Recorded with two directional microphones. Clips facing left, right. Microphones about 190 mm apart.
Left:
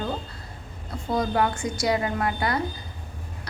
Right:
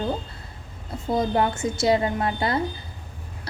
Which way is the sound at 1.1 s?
25° right (ahead or behind).